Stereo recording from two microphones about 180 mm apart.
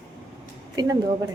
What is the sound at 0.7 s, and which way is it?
Speech, 20° right (ahead or behind).